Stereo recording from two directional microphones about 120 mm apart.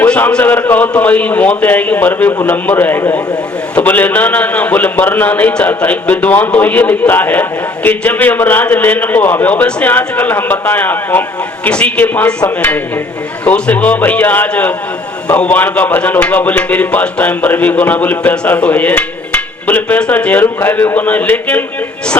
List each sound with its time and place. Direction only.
0.0 s a man's voice: 10° left (ahead or behind)